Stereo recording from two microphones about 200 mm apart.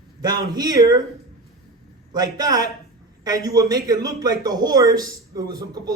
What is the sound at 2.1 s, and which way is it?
A man's voice, 20° right (ahead or behind).